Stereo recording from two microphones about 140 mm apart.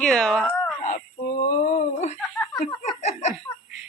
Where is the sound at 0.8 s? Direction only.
70° left (ahead or behind).